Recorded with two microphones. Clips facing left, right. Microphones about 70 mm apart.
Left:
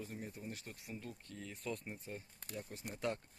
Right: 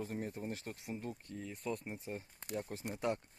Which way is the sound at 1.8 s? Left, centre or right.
Centre.